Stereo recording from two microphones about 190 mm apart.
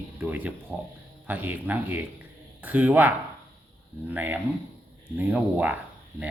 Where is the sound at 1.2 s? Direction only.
10° right (ahead or behind).